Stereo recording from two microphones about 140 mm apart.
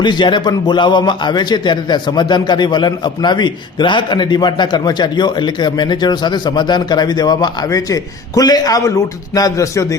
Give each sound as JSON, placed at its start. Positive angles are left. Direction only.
{"t": 0.0, "sound": "a man's voice", "side_deg": 35}